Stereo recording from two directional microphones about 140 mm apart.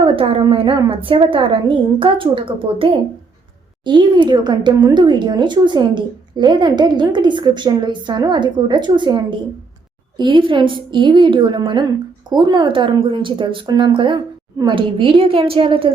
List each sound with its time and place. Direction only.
0.0 s a woman's voice: 40° right (ahead or behind)